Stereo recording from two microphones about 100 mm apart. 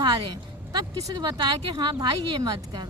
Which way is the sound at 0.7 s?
40° right (ahead or behind).